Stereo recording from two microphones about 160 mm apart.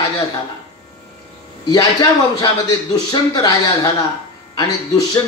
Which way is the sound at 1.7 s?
20° left (ahead or behind).